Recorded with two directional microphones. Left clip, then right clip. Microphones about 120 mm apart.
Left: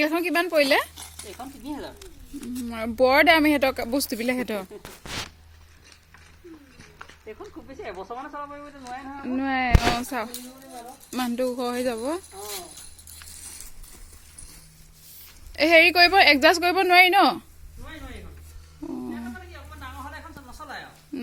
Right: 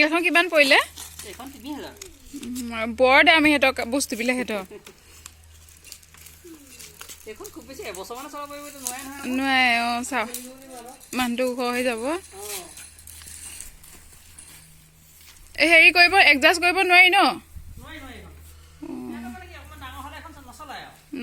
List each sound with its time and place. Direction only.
0.0 s speech: centre (ahead or behind)
0.9 s a sound: 20° left (ahead or behind)
1.3 s speech: 5° left (ahead or behind)
7.3 s speech: 5° right (ahead or behind)
7.7 s speech: 20° right (ahead or behind); by 12.2 s centre (ahead or behind)
15.5 s speech: 20° left (ahead or behind)
18.8 s roaring cats: 15° left (ahead or behind)
20.6 s a sound: 5° right (ahead or behind)
21.1 s speech: 10° left (ahead or behind)